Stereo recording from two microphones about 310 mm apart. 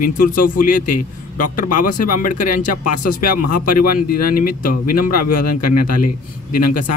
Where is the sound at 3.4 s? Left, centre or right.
Left.